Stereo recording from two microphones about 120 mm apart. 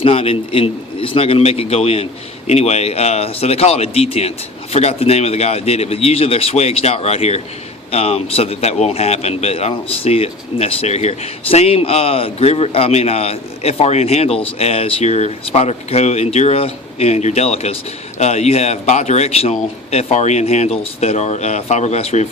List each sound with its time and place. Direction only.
0.0 s a man's voice: 50° left (ahead or behind)